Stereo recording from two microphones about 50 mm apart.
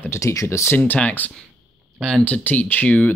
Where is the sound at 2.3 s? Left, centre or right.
Left.